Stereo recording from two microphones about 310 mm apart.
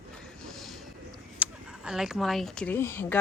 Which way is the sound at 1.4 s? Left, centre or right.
Centre.